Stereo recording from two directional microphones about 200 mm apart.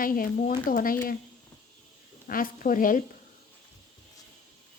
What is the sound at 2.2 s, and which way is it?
Speech, 45° left (ahead or behind).